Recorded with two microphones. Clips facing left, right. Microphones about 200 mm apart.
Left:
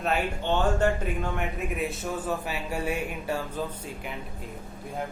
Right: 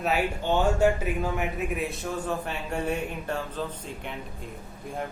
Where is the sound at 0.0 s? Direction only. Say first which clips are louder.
Right 1 dB; 5° right (ahead or behind).